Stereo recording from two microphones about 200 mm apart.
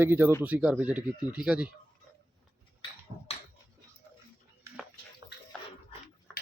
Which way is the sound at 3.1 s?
35° right (ahead or behind).